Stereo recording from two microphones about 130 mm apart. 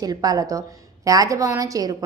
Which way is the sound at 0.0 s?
30° right (ahead or behind).